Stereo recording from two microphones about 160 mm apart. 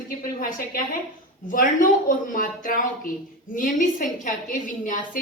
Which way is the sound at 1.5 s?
55° left (ahead or behind).